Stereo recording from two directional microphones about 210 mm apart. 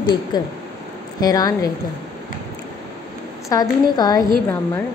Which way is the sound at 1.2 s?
20° left (ahead or behind).